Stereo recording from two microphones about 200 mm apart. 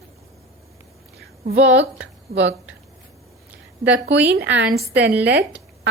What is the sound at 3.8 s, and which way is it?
A woman's voice, 60° right (ahead or behind).